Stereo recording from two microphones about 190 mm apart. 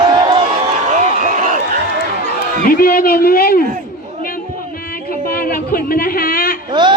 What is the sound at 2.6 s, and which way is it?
Speech, 50° left (ahead or behind).